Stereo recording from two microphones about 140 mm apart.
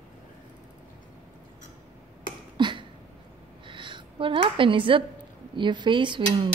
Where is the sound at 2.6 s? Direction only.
35° right (ahead or behind).